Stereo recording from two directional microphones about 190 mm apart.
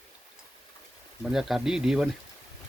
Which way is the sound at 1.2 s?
Centre (ahead or behind).